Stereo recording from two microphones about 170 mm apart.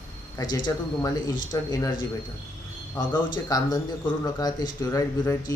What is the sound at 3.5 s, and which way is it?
Speech, 20° left (ahead or behind).